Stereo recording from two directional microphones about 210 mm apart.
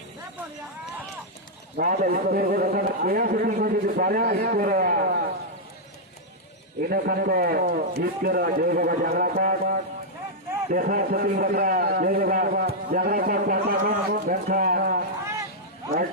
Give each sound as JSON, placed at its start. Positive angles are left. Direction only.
{"t": 1.7, "sound": "a man's voice", "side_deg": -40}
{"t": 6.8, "sound": "a man's voice", "side_deg": -45}